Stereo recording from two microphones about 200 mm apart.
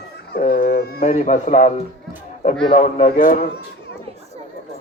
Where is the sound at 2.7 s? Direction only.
35° left (ahead or behind).